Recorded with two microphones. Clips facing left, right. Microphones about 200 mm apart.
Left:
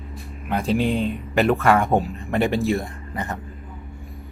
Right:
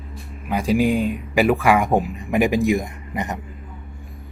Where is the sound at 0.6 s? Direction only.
10° right (ahead or behind).